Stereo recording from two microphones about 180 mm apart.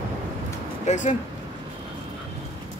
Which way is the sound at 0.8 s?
40° left (ahead or behind).